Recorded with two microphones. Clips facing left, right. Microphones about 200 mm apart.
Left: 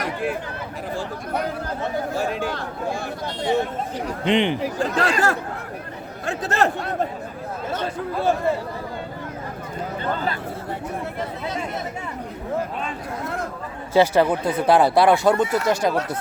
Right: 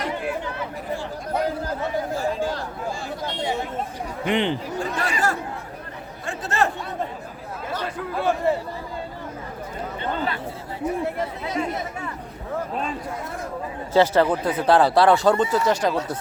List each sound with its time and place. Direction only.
2.1 s speech: 70° left (ahead or behind)
4.2 s speech: 15° left (ahead or behind)
4.6 s speech: 90° left
6.4 s a man's voice: 35° left (ahead or behind)
7.7 s speech: 25° left (ahead or behind)
13.9 s speech: 10° left (ahead or behind)